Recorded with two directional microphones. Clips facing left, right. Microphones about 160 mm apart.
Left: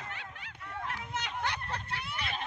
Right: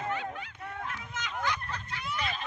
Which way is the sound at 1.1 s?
65° left (ahead or behind).